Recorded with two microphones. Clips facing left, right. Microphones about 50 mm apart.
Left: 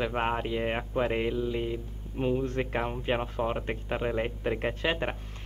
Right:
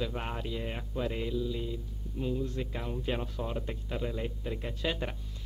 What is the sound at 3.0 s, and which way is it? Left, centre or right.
Speech, left.